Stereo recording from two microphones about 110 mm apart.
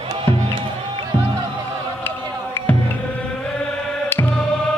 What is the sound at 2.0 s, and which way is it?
Music, 20° left (ahead or behind).